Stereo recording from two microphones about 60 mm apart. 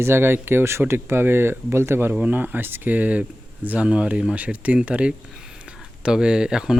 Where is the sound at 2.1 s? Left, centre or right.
Right.